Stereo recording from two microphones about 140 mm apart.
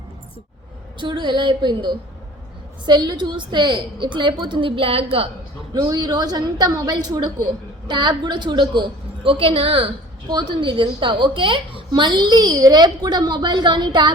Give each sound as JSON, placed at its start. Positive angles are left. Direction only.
{"t": 0.9, "sound": "a woman's voice", "side_deg": -35}
{"t": 5.7, "sound": "a woman's voice", "side_deg": -30}